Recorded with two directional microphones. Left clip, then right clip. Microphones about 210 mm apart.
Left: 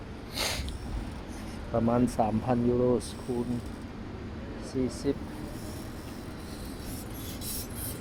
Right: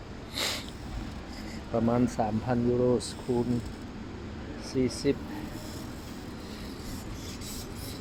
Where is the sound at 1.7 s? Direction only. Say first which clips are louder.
Left 1 dB; 5° right (ahead or behind).